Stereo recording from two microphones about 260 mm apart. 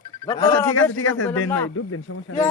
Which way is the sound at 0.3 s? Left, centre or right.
Centre.